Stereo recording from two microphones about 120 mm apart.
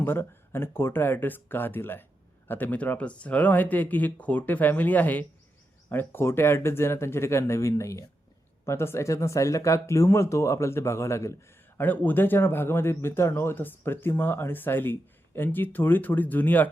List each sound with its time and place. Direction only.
0.0 s a man's voice: 20° left (ahead or behind)